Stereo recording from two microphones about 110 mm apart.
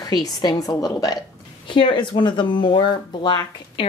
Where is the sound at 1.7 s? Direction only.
45° left (ahead or behind).